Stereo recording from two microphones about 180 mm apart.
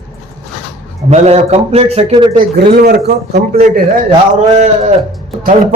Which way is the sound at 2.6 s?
65° right (ahead or behind).